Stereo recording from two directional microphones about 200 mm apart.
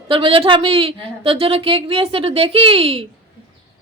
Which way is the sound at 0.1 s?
25° right (ahead or behind).